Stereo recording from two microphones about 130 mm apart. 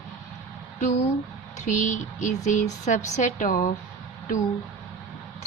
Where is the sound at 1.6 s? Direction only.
70° left (ahead or behind).